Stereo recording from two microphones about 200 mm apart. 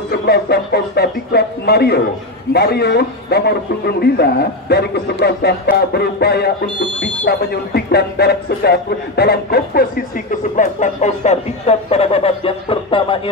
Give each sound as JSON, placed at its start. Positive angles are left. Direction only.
{"t": 0.2, "sound": "a man's voice", "side_deg": 55}